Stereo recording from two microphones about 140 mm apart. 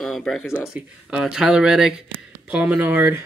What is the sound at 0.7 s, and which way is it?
Speech, 5° right (ahead or behind).